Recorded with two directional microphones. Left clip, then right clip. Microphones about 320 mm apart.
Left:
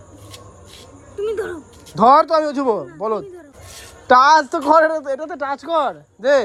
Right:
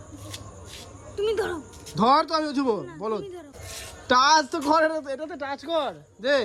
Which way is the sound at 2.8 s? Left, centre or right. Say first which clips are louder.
Left 7 dB; centre.